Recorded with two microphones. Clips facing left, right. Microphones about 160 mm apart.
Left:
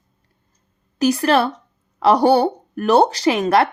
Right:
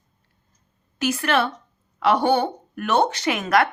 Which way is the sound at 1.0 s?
35° left (ahead or behind).